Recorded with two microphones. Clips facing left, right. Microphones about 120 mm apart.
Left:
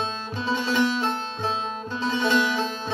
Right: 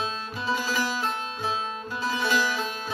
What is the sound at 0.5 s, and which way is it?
Music, 25° left (ahead or behind).